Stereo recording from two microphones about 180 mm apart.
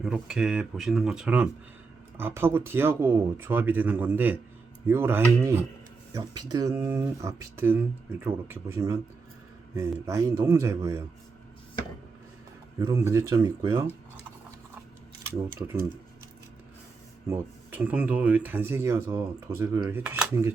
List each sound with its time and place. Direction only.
0.0 s speech: 5° right (ahead or behind)
12.8 s speech: 15° right (ahead or behind)
15.3 s speech: 15° right (ahead or behind)
17.2 s speech: 10° right (ahead or behind)